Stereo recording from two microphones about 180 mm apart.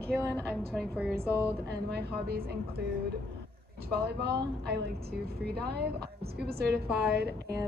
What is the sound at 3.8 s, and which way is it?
Speech, 60° right (ahead or behind).